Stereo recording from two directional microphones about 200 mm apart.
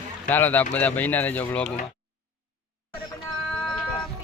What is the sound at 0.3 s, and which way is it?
Speech, 10° left (ahead or behind).